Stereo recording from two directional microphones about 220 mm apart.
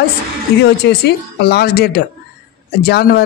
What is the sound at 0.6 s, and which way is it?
Speech, 50° left (ahead or behind).